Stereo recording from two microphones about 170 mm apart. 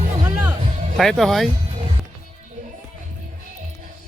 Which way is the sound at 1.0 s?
Centre (ahead or behind).